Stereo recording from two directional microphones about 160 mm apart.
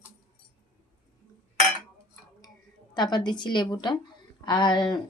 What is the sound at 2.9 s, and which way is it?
A woman's voice, 30° left (ahead or behind).